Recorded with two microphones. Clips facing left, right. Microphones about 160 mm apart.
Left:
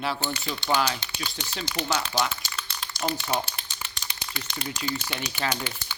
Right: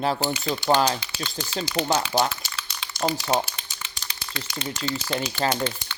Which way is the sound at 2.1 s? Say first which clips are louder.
Right 5 dB; 35° right (ahead or behind).